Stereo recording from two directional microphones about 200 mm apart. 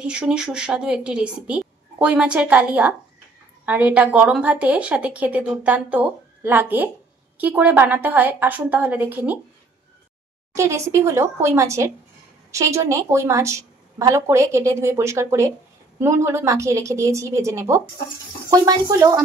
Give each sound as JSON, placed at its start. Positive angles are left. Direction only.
{"t": 0.0, "sound": "a woman's voice", "side_deg": -5}
{"t": 10.5, "sound": "a woman's voice", "side_deg": -15}